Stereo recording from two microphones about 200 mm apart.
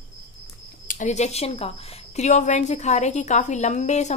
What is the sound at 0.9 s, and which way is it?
A woman's voice, 35° left (ahead or behind).